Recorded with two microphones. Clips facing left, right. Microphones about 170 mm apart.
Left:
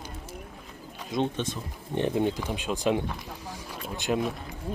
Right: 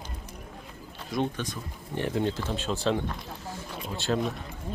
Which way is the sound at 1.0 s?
20° left (ahead or behind).